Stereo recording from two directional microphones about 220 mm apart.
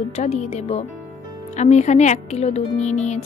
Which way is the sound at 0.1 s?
30° left (ahead or behind).